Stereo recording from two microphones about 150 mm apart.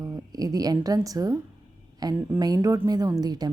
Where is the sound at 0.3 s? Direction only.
25° right (ahead or behind).